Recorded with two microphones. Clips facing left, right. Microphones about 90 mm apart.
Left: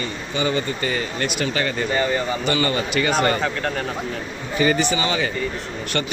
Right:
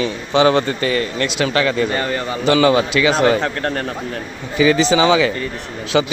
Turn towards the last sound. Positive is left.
turn(degrees=-90)